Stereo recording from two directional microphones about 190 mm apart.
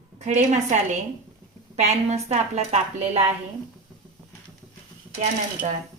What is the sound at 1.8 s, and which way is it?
A woman's voice, 35° right (ahead or behind).